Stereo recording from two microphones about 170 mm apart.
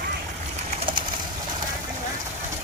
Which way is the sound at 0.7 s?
35° right (ahead or behind).